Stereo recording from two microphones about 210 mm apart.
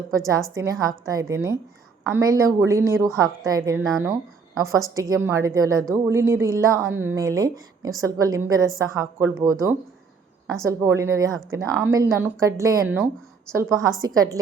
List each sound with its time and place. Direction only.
0.1 s speech: 15° right (ahead or behind)
4.9 s speech: 15° right (ahead or behind)